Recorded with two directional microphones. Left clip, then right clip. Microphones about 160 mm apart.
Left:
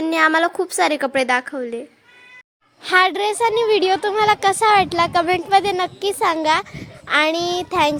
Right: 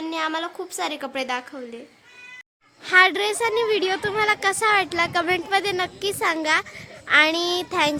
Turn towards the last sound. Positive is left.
turn(degrees=20)  # may be behind; listen again after turning